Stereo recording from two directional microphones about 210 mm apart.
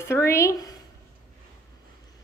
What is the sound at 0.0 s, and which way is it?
Speech, 10° left (ahead or behind).